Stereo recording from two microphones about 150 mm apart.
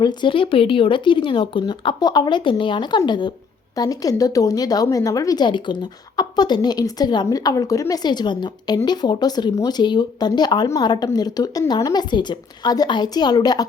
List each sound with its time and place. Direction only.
0.0 s a woman's voice: 30° left (ahead or behind)